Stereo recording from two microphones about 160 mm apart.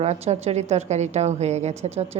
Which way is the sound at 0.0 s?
45° right (ahead or behind).